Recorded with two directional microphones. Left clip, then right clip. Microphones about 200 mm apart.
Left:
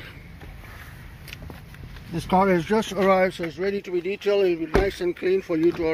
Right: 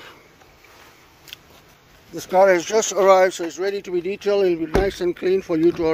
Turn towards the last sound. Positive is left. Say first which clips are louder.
# right 4 dB
turn(degrees=-20)  # may be behind; listen again after turning